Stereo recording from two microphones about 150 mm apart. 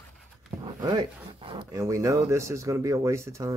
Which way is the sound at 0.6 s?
25° right (ahead or behind).